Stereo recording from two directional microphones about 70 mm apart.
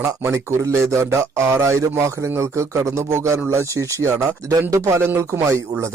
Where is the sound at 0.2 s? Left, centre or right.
Right.